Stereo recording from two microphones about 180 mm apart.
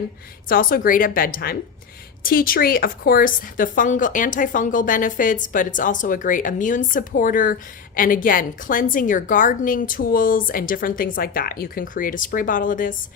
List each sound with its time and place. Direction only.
0.4 s a woman's voice: 50° left (ahead or behind)